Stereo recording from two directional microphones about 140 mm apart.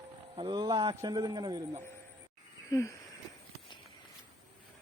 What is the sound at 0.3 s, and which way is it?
A man's voice, 35° right (ahead or behind).